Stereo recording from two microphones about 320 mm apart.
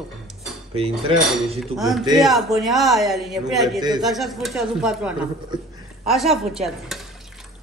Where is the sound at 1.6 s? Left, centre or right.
Centre.